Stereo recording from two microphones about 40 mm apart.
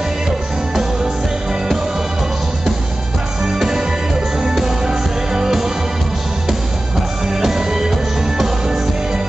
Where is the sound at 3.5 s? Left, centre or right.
Centre.